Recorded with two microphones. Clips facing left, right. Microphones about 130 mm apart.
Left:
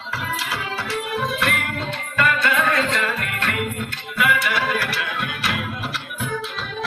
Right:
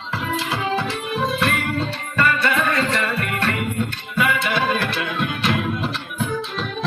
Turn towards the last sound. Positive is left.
turn(degrees=-30)  # may be behind; listen again after turning